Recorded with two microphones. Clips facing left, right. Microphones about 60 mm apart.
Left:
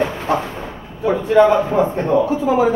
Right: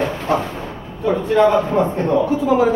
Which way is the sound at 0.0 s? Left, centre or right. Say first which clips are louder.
Even; centre.